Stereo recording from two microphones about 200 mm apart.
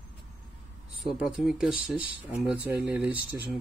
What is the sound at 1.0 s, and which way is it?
A man's voice, centre (ahead or behind).